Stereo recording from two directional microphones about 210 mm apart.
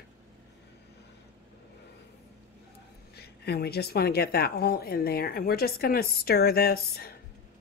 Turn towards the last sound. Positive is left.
turn(degrees=50)  # may be behind; listen again after turning